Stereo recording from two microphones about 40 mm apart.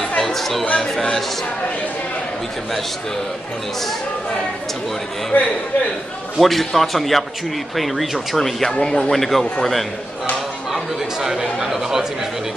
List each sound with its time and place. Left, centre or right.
0.2 s a sound: centre
5.3 s a man's voice: left
6.4 s a man's voice: centre
8.6 s a man's voice: centre
9.1 s a man's voice: centre
10.7 s speech: centre